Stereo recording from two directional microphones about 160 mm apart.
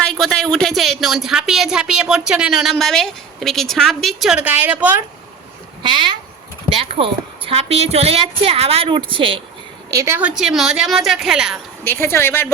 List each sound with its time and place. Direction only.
0.1 s a woman's voice: centre (ahead or behind)
5.8 s a woman's voice: 30° right (ahead or behind)
9.9 s a woman's voice: 15° right (ahead or behind)
11.9 s speech: 15° left (ahead or behind)